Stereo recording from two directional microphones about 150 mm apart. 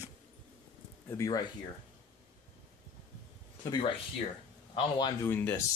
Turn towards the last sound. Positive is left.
turn(degrees=15)  # may be behind; listen again after turning